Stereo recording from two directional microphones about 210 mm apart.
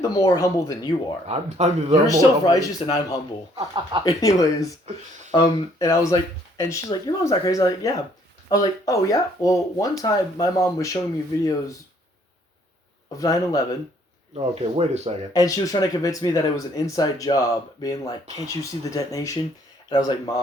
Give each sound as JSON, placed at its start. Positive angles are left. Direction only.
{"t": 0.0, "sound": "speech", "side_deg": 15}
{"t": 1.3, "sound": "speech", "side_deg": -30}
{"t": 2.0, "sound": "speech", "side_deg": 15}
{"t": 13.1, "sound": "speech", "side_deg": 15}
{"t": 14.3, "sound": "speech", "side_deg": -30}
{"t": 15.3, "sound": "speech", "side_deg": 15}